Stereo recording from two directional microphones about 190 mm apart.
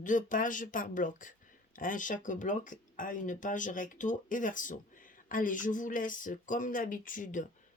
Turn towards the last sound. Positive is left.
turn(degrees=45)  # may be behind; listen again after turning